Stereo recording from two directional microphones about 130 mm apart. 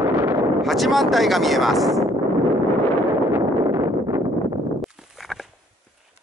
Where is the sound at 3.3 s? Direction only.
20° right (ahead or behind).